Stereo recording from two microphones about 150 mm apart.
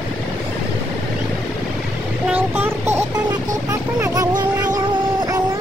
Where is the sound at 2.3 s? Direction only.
15° right (ahead or behind).